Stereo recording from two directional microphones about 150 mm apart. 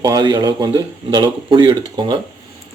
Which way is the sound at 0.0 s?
25° right (ahead or behind).